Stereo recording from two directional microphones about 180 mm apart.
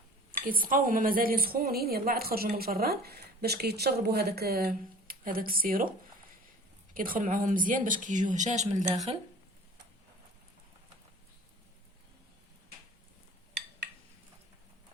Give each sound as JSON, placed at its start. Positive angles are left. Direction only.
{"t": 0.4, "sound": "a woman's voice", "side_deg": -50}
{"t": 6.9, "sound": "speech", "side_deg": -50}